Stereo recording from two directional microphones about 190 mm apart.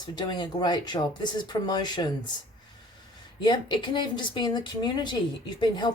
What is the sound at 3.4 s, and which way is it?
Speech, 25° left (ahead or behind).